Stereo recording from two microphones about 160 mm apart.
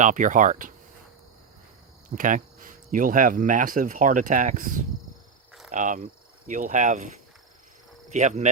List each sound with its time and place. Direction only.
0.0 s speech: 50° right (ahead or behind)
2.0 s speech: 55° right (ahead or behind)
8.1 s speech: 45° right (ahead or behind)